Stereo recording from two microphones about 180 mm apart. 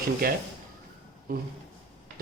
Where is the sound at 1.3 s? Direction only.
55° right (ahead or behind).